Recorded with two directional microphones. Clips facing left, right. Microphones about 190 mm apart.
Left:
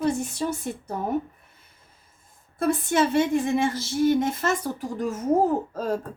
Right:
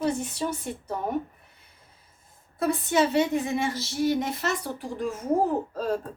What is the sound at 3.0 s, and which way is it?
A woman's voice, 50° left (ahead or behind).